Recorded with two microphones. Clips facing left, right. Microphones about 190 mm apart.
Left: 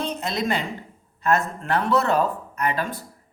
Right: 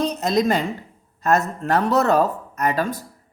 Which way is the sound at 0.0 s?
40° right (ahead or behind).